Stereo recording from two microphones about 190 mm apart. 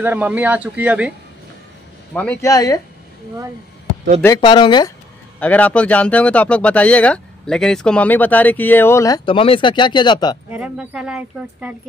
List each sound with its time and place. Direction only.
0.0 s speech: 10° right (ahead or behind)
2.1 s speech: 5° left (ahead or behind)
2.5 s speech: 20° left (ahead or behind)
4.2 s speech: 20° left (ahead or behind)
5.4 s speech: 5° left (ahead or behind); by 10.3 s 25° left (ahead or behind)
10.5 s speech: 5° right (ahead or behind)